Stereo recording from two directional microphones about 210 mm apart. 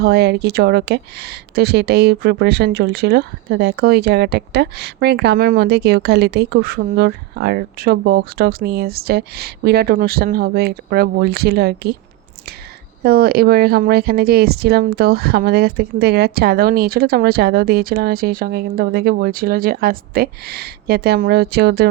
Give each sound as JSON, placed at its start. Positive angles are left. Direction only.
{"t": 0.0, "sound": "speech", "side_deg": -50}
{"t": 13.0, "sound": "speech", "side_deg": -45}